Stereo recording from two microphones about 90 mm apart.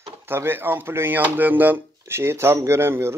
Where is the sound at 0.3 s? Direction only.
25° right (ahead or behind).